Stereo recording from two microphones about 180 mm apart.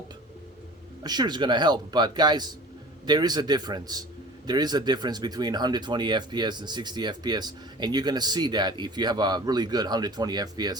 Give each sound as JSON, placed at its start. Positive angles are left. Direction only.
{"t": 1.0, "sound": "speech", "side_deg": -25}